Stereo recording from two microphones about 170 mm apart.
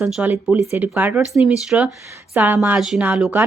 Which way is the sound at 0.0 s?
5° right (ahead or behind).